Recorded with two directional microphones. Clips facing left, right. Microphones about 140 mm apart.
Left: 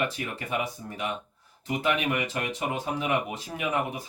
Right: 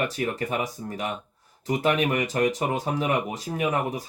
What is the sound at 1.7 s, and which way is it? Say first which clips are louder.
Speech: right 4 dB; 40° right (ahead or behind).